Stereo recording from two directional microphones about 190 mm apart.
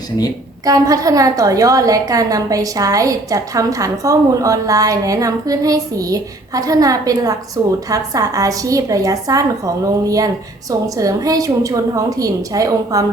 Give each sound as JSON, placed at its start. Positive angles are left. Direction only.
{"t": 0.6, "sound": "a woman's voice", "side_deg": -20}